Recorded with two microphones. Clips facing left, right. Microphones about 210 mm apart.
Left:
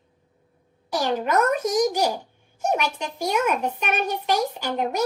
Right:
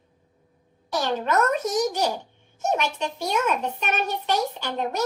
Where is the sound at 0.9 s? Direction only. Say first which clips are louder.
Left 1 dB; 10° left (ahead or behind).